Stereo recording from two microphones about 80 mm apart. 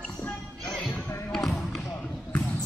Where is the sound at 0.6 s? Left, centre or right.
Centre.